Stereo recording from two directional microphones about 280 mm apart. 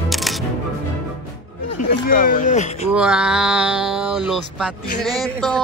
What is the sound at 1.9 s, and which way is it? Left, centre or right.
Speech, left.